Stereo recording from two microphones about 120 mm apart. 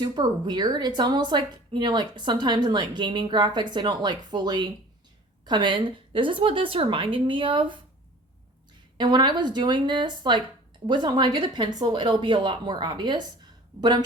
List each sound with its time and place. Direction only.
0.0 s a woman's voice: 35° right (ahead or behind)
9.0 s a woman's voice: 40° right (ahead or behind)